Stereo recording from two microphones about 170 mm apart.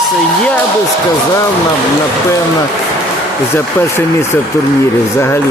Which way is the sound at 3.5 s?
15° left (ahead or behind).